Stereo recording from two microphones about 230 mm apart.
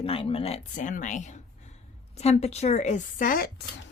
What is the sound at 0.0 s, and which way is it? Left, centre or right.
Speech, left.